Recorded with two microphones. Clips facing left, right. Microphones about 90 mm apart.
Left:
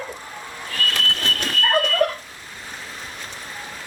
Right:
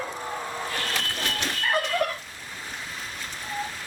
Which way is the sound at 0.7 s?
25° right (ahead or behind).